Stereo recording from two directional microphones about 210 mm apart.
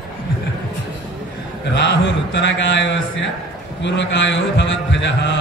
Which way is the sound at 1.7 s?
55° left (ahead or behind).